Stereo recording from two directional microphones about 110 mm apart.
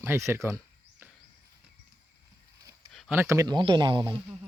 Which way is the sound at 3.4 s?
45° right (ahead or behind).